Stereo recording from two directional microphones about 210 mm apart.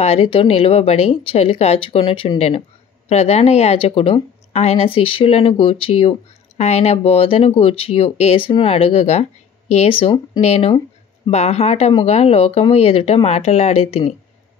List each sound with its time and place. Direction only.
0.0 s a woman's voice: 30° left (ahead or behind)